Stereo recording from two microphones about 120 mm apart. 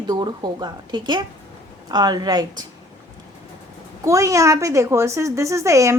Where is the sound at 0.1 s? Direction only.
35° right (ahead or behind).